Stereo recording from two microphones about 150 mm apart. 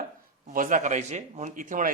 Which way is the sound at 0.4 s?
60° right (ahead or behind).